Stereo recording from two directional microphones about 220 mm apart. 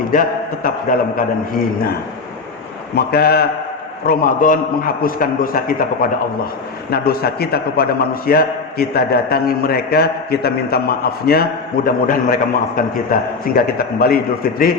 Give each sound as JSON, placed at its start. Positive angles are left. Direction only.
{"t": 0.1, "sound": "a man's voice", "side_deg": 40}
{"t": 2.9, "sound": "a man's voice", "side_deg": 45}